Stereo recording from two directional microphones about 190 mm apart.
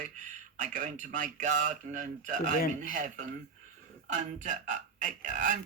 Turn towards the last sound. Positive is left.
turn(degrees=-40)  # may be behind; listen again after turning